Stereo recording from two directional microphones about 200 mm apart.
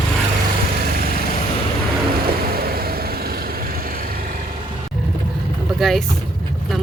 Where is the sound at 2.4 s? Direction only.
50° right (ahead or behind).